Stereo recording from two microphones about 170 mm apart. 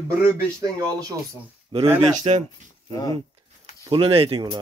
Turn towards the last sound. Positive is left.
turn(degrees=-30)  # may be behind; listen again after turning